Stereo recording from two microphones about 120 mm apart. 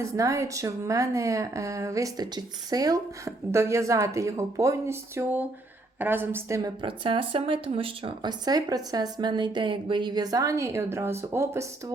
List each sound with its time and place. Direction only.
0.0 s a woman's voice: 25° right (ahead or behind)
6.8 s speech: 45° right (ahead or behind); by 11.6 s 20° right (ahead or behind)